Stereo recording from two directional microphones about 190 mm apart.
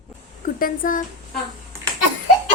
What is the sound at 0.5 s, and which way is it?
Speech, 45° left (ahead or behind).